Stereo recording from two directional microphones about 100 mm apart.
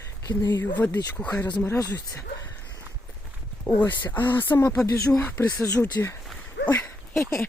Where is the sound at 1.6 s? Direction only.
25° left (ahead or behind).